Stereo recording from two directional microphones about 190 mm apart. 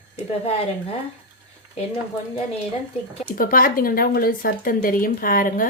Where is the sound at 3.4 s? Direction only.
45° left (ahead or behind).